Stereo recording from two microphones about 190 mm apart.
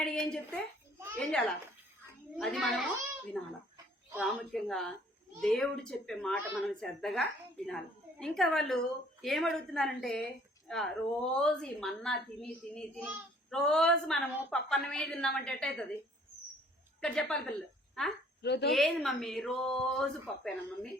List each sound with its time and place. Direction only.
0.0 s a sound: 5° left (ahead or behind)
1.1 s a child's voice: 5° left (ahead or behind)
17.0 s a child's voice: 5° left (ahead or behind)
18.4 s a woman's voice: 60° left (ahead or behind)
18.7 s a child's voice: centre (ahead or behind)